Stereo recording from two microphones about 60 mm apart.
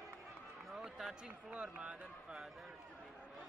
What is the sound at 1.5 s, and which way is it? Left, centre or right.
Speech, centre.